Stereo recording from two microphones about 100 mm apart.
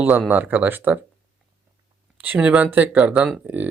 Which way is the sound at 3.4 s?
15° right (ahead or behind).